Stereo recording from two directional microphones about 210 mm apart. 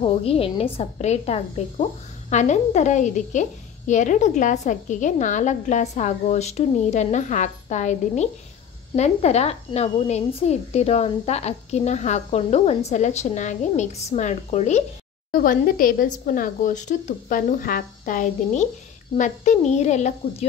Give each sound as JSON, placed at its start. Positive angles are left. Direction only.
{"t": 0.0, "sound": "a woman's voice", "side_deg": 25}
{"t": 15.3, "sound": "speech", "side_deg": 45}